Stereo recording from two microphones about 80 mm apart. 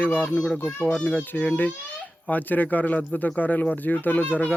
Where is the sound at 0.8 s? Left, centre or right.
Centre.